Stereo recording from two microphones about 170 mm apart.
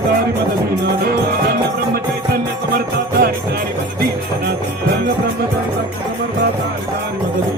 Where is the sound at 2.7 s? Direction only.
65° right (ahead or behind).